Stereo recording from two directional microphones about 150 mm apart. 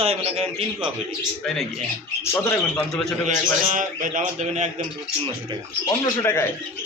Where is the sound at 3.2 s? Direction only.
60° right (ahead or behind).